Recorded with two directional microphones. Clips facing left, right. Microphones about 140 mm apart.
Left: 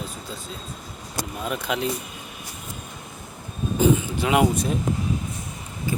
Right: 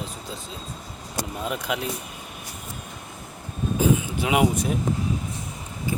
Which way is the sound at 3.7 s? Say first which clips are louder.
Left 2 dB; 5° right (ahead or behind).